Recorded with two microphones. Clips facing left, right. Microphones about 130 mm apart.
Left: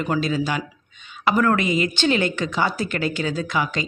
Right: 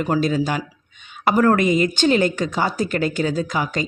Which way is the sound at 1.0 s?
50° right (ahead or behind).